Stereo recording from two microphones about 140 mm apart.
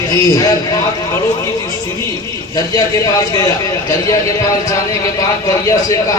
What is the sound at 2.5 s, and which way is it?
Speech, 25° left (ahead or behind).